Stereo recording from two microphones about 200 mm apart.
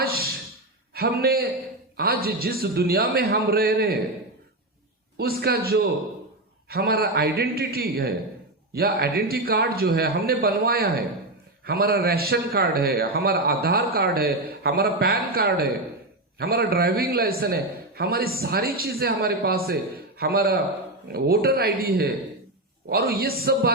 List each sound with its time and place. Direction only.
0.0 s a sound: 50° right (ahead or behind)
0.9 s a man's voice: 50° right (ahead or behind)
5.1 s a man's voice: 50° right (ahead or behind)